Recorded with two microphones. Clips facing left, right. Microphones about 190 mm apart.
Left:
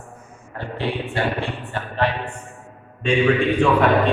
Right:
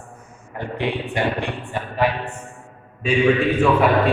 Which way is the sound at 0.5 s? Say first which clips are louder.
Right 1 dB; 15° right (ahead or behind).